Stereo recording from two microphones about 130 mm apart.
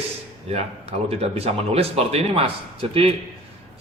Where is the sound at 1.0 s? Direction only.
50° right (ahead or behind).